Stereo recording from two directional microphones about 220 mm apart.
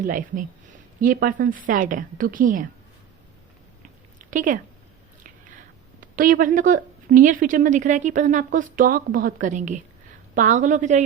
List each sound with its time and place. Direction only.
0.0 s a woman's voice: 40° right (ahead or behind)
3.8 s a sound: 35° right (ahead or behind)
6.1 s a woman's voice: 40° right (ahead or behind)